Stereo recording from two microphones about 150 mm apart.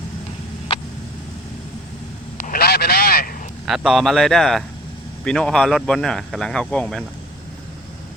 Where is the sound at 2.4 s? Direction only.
80° left.